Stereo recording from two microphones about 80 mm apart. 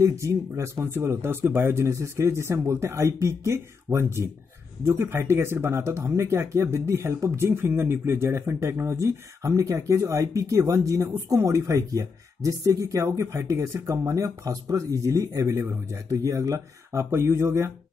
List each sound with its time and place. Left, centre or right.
0.0 s speech: right